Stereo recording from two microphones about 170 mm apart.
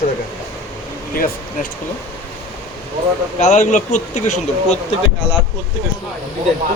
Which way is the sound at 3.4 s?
45° left (ahead or behind).